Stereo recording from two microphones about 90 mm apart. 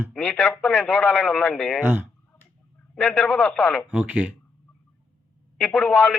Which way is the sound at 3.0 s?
5° left (ahead or behind).